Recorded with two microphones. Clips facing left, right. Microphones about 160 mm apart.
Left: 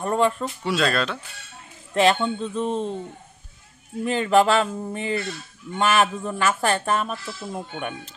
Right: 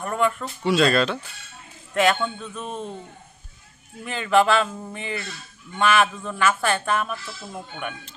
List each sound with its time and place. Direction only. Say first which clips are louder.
0.0 s speech: left 2 dB; 30° left (ahead or behind)
0.7 s speech: right 4 dB; centre (ahead or behind)
2.0 s speech: left 2 dB; 25° left (ahead or behind)
4.0 s speech: left 2 dB; 35° left (ahead or behind)